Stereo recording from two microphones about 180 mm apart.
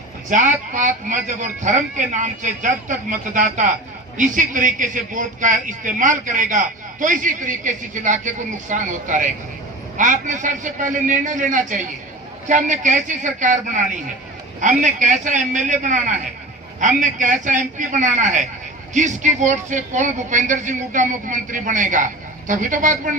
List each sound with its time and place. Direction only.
0.3 s a man's voice: 45° right (ahead or behind)